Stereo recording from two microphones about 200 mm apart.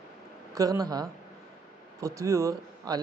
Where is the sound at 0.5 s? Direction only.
15° right (ahead or behind).